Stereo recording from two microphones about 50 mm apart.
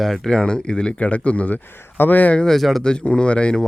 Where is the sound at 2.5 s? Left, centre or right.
Centre.